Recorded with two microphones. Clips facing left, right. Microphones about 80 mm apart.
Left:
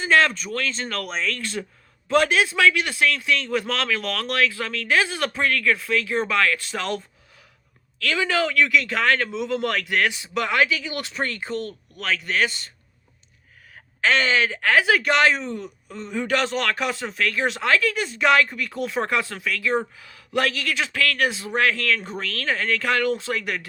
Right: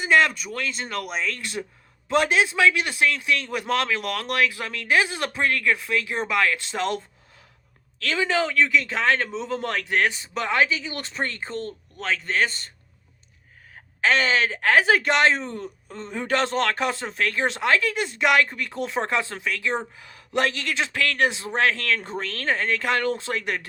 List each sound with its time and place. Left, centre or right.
0.0 s a man's voice: centre; by 12.7 s right
14.3 s a man's voice: right